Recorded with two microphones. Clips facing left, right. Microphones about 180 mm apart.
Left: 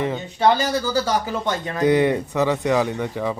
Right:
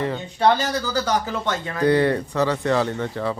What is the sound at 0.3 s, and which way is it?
Speech, 10° left (ahead or behind).